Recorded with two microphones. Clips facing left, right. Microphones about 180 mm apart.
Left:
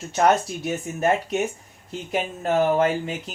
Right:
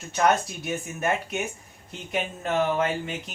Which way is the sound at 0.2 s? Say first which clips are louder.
Left 3 dB; 35° left (ahead or behind).